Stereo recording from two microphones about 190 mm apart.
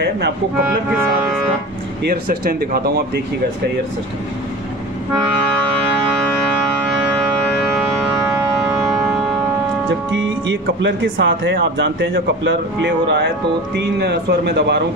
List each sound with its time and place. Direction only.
2.0 s speech: 50° right (ahead or behind)
8.3 s civil defense siren: 5° right (ahead or behind)
10.1 s a man's voice: 80° right; by 14.8 s 60° right (ahead or behind)